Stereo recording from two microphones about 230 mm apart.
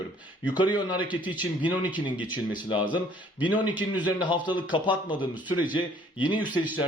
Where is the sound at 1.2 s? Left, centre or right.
Centre.